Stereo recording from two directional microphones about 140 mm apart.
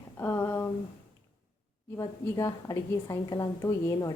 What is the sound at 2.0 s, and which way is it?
A woman's voice, 25° left (ahead or behind).